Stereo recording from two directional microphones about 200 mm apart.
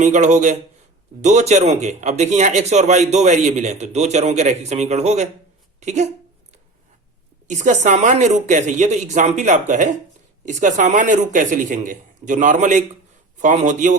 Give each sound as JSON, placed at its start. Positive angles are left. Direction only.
{"t": 0.0, "sound": "a man's voice", "side_deg": -35}
{"t": 7.4, "sound": "a man's voice", "side_deg": -40}